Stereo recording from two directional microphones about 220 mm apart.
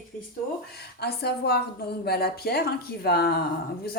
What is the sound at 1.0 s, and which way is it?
A woman's voice, 45° left (ahead or behind).